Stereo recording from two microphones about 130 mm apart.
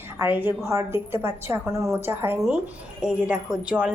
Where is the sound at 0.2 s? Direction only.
15° right (ahead or behind).